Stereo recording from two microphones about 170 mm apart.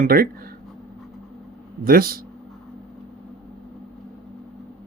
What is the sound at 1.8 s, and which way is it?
Speech, 60° right (ahead or behind).